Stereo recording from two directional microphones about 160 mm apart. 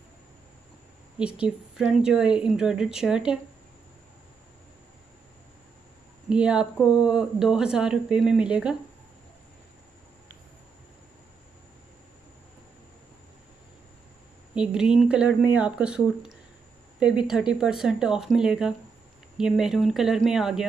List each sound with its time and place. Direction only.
1.1 s speech: 5° right (ahead or behind)
6.2 s speech: 5° right (ahead or behind)
14.5 s speech: 5° right (ahead or behind)